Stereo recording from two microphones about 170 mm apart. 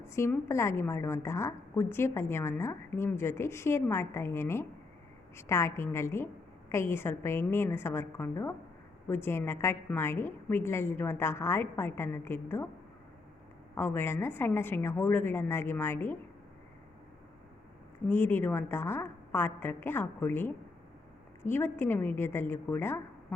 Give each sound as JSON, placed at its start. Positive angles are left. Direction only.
{"t": 0.0, "sound": "a woman's voice", "side_deg": 15}
{"t": 13.7, "sound": "a woman's voice", "side_deg": 15}
{"t": 18.1, "sound": "a woman's voice", "side_deg": 10}
{"t": 21.5, "sound": "a woman's voice", "side_deg": 10}